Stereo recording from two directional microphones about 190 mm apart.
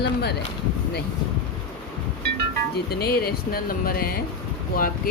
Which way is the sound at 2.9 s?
55° left (ahead or behind).